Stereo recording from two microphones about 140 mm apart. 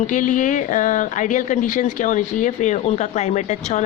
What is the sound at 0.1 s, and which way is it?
Speech, 70° left (ahead or behind).